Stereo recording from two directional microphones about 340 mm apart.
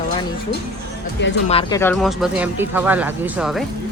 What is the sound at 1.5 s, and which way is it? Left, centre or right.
Speech, centre.